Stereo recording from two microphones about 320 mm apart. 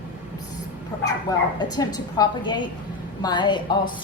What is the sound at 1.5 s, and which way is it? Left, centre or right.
A woman's voice, centre.